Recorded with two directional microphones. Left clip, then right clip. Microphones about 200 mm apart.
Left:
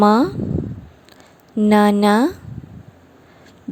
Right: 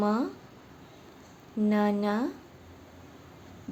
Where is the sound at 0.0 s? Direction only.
45° left (ahead or behind).